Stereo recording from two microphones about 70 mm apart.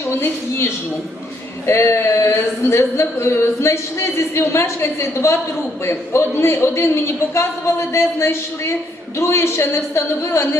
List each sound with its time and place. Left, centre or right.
0.0 s speech: left